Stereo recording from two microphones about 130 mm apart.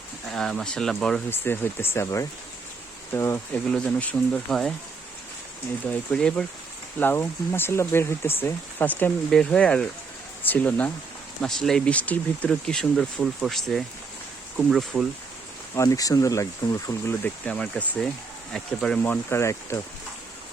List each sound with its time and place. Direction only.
0.3 s speech: 5° left (ahead or behind)
1.3 s speech: 15° left (ahead or behind)
3.5 s speech: 10° left (ahead or behind)
5.8 s speech: 10° left (ahead or behind)
15.7 s speech: 25° left (ahead or behind)
17.2 s speech: 10° left (ahead or behind)